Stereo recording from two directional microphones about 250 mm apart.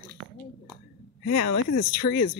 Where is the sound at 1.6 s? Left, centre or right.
Left.